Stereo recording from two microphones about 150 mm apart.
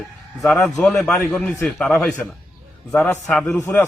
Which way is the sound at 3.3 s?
5° left (ahead or behind).